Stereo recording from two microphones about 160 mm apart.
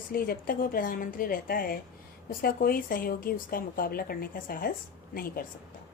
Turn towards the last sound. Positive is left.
turn(degrees=65)  # may be behind; listen again after turning